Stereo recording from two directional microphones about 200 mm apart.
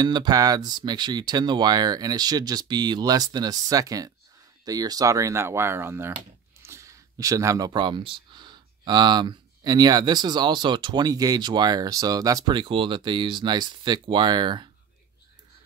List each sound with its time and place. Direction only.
0.0 s speech: 20° right (ahead or behind)